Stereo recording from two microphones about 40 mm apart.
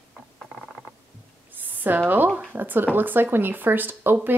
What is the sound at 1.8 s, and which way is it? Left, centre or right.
A woman's voice, right.